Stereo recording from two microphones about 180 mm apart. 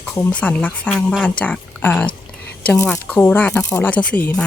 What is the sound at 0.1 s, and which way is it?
Speech, 5° left (ahead or behind).